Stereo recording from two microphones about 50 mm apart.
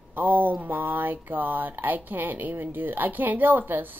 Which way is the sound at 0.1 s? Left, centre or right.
Right.